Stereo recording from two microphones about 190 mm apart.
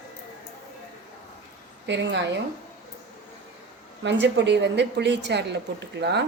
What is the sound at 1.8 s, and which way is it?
Speech, 70° right (ahead or behind).